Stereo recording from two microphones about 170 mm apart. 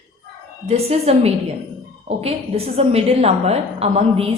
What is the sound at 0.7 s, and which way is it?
A woman's voice, 35° right (ahead or behind).